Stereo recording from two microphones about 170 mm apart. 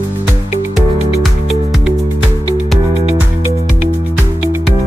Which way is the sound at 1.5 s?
Centre (ahead or behind).